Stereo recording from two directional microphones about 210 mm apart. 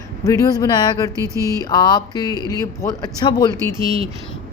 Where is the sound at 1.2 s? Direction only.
15° right (ahead or behind).